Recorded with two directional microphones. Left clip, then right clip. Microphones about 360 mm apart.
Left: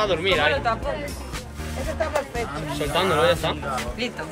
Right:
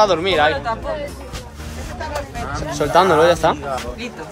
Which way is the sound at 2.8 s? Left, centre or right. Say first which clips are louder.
Right 9 dB; right.